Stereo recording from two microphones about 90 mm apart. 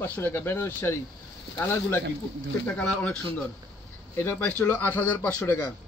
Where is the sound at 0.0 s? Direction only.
20° left (ahead or behind).